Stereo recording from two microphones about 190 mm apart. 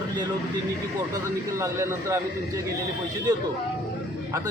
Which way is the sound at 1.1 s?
15° right (ahead or behind).